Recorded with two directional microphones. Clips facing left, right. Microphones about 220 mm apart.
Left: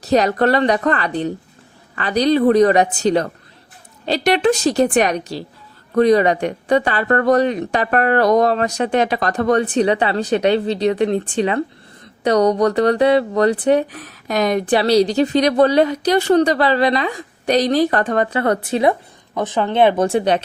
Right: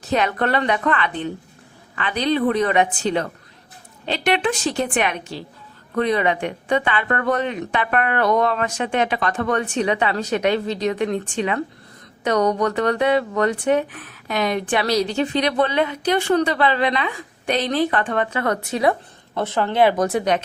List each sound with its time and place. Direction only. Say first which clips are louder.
0.0 s speech: left 6 dB; 40° left (ahead or behind)
19.3 s speech: left 3 dB; 15° left (ahead or behind)